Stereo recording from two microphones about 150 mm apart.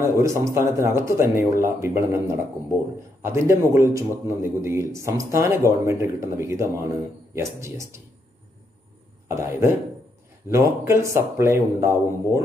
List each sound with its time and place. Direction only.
0.0 s a man's voice: 20° right (ahead or behind)
3.2 s a man's voice: 20° right (ahead or behind)
9.3 s a man's voice: 15° right (ahead or behind)